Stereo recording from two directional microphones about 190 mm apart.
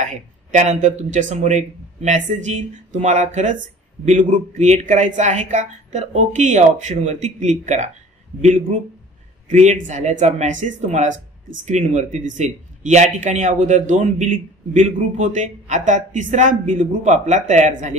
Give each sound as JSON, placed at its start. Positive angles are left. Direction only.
{"t": 0.0, "sound": "a man's voice", "side_deg": -40}